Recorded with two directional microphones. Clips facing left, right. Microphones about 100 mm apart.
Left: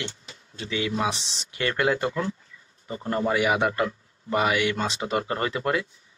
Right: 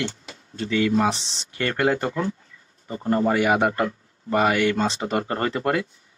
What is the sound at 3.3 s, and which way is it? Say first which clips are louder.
Speech: right 1 dB; 50° right (ahead or behind).